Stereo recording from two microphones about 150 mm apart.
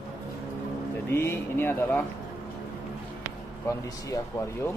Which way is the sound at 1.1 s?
15° left (ahead or behind).